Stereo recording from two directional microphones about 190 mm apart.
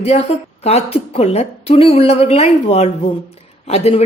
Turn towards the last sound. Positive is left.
turn(degrees=35)  # may be behind; listen again after turning